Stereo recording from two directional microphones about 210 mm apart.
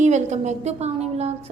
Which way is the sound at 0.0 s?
35° right (ahead or behind).